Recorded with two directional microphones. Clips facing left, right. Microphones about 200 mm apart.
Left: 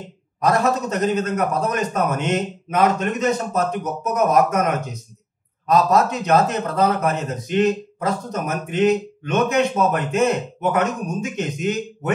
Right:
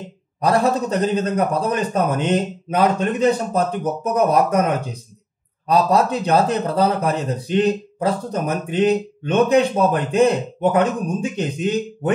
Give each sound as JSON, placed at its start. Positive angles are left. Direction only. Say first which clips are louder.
{"t": 0.4, "sound": "speech", "louder": "right 1 dB", "side_deg": -30}